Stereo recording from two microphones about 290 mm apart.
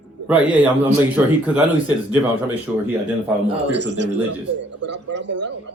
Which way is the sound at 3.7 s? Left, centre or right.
Right.